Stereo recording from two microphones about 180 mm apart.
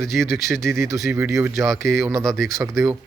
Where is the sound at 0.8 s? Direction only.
15° right (ahead or behind).